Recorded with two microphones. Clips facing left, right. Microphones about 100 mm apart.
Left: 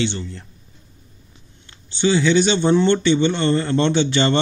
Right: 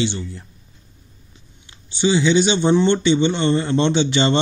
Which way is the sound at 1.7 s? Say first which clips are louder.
Even; 15° right (ahead or behind).